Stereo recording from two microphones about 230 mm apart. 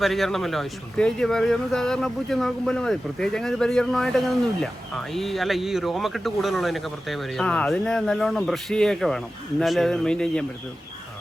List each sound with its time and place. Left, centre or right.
0.0 s speech: centre